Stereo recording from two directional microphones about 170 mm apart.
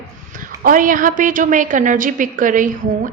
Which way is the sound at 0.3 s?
50° right (ahead or behind).